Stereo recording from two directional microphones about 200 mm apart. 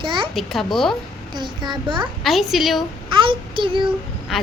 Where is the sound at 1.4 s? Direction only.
20° right (ahead or behind).